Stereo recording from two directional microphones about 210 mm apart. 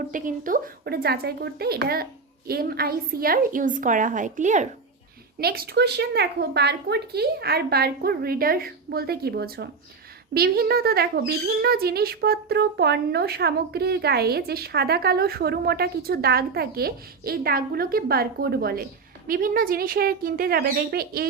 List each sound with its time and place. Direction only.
0.1 s a woman's voice: 40° right (ahead or behind)
5.4 s speech: 45° right (ahead or behind)